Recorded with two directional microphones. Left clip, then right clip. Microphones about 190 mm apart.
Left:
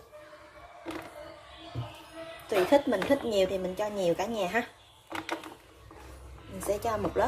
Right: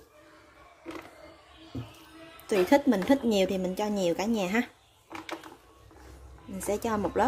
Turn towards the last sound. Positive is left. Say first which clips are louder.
# right 1 dB
turn(degrees=-55)  # may be behind; listen again after turning